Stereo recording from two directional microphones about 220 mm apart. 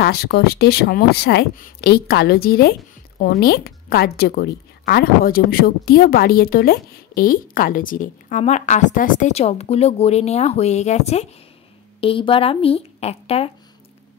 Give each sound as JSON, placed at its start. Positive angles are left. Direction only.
{"t": 0.0, "sound": "a woman's voice", "side_deg": 45}